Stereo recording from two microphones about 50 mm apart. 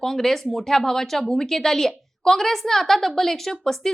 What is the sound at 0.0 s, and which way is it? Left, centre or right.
A woman's voice, centre.